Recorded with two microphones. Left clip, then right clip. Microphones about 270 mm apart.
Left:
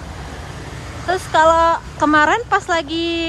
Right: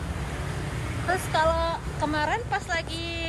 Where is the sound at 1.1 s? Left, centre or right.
Left.